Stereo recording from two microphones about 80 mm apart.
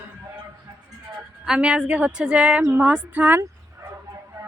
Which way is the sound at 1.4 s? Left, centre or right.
Centre.